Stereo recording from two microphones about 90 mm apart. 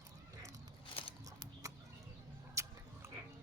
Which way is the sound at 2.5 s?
35° right (ahead or behind).